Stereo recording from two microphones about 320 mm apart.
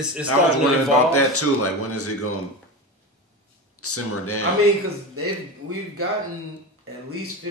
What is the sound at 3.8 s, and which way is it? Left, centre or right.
Speech, left.